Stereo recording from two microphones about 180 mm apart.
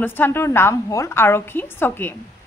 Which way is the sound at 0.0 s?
10° left (ahead or behind).